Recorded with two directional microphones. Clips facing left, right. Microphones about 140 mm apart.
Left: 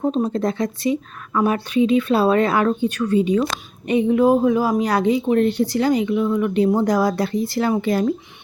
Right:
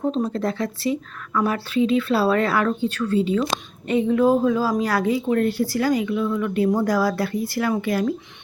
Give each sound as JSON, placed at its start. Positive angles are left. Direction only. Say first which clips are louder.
{"t": 0.0, "sound": "speech", "louder": "left 3 dB", "side_deg": 20}